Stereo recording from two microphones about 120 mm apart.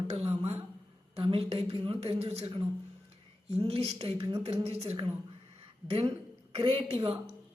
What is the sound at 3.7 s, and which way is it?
A woman's voice, 55° right (ahead or behind).